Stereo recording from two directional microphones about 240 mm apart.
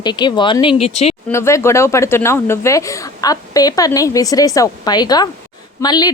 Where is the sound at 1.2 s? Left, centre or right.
Centre.